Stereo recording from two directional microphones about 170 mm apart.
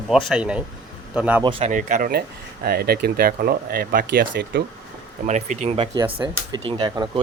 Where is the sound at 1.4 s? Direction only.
30° right (ahead or behind).